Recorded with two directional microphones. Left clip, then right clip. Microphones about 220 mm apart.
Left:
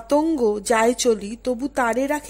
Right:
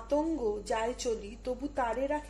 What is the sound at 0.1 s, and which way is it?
A woman's voice, 45° left (ahead or behind).